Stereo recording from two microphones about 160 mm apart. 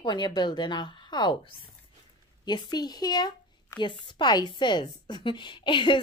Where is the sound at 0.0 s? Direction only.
30° left (ahead or behind).